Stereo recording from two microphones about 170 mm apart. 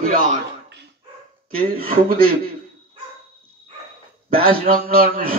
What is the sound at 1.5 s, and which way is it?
Speech, 60° right (ahead or behind).